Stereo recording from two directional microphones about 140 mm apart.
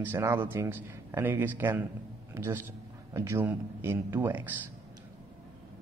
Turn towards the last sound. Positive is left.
turn(degrees=-15)  # may be behind; listen again after turning